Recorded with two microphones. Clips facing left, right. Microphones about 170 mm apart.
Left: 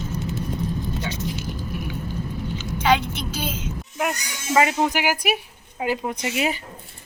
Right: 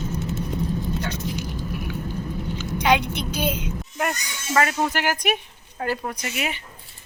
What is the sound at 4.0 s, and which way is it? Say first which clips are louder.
Speech: left 1 dB; 5° left (ahead or behind).